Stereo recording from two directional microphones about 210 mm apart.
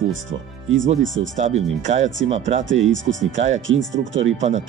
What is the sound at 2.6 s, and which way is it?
Speech, 65° right (ahead or behind).